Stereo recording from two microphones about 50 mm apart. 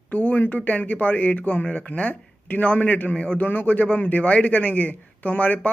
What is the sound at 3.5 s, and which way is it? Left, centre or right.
Speech, left.